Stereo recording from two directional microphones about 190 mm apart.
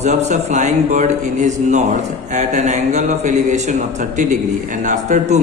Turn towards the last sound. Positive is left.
turn(degrees=-40)  # may be behind; listen again after turning